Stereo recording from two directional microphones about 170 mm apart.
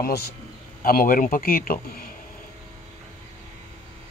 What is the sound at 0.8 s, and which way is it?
Speech, 55° left (ahead or behind).